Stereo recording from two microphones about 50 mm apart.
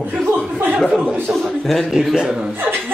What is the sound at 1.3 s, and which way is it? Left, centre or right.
Speech, right.